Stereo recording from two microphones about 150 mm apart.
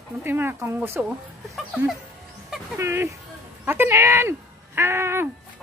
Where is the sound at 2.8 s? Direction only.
20° right (ahead or behind).